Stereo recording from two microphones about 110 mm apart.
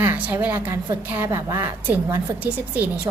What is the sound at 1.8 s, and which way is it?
A woman's voice, 15° right (ahead or behind).